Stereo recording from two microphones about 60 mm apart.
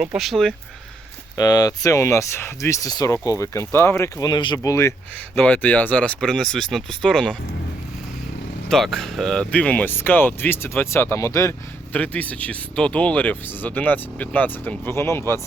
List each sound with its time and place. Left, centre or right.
0.2 s speech: centre
1.4 s speech: left
3.1 s speech: left
4.2 s speech: left
5.4 s speech: left
6.1 s speech: centre
8.7 s speech: centre
9.4 s speech: left
9.8 s speech: left
10.9 s speech: left
11.3 s speech: left
11.9 s speech: left
14.9 s speech: left